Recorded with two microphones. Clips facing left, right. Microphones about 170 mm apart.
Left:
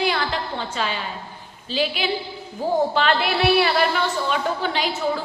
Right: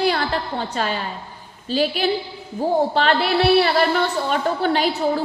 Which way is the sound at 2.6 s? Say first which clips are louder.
Right 2 dB; 30° right (ahead or behind).